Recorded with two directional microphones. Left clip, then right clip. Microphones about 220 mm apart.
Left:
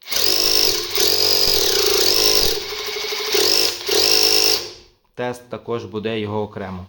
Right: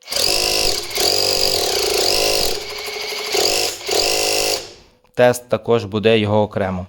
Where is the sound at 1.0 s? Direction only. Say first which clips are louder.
Even; 5° right (ahead or behind).